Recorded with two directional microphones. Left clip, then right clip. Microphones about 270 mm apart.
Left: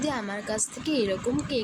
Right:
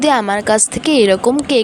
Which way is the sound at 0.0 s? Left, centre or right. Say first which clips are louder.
Right 17 dB; right.